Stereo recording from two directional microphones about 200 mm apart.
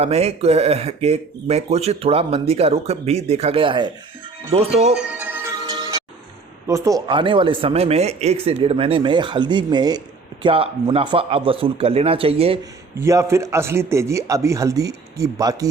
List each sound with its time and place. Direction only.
0.0 s speech: 30° right (ahead or behind)
5.2 s music: 10° right (ahead or behind)
6.7 s speech: 15° right (ahead or behind)
13.0 s a man's voice: 15° right (ahead or behind)